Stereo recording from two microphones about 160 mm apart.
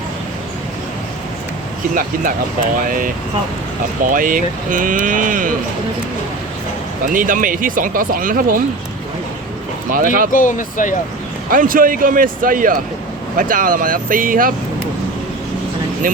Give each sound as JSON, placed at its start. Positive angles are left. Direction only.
{"t": 4.0, "sound": "speech", "side_deg": -55}
{"t": 7.1, "sound": "speech", "side_deg": -55}
{"t": 9.9, "sound": "speech", "side_deg": -60}
{"t": 10.3, "sound": "speech", "side_deg": 55}
{"t": 11.5, "sound": "speech", "side_deg": -60}
{"t": 16.0, "sound": "speech", "side_deg": -60}